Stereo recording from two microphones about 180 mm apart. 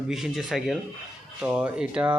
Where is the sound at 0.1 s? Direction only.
Centre (ahead or behind).